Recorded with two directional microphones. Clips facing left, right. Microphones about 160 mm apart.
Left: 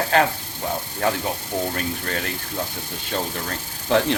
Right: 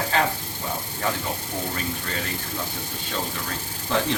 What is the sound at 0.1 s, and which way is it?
Speech, 65° left (ahead or behind).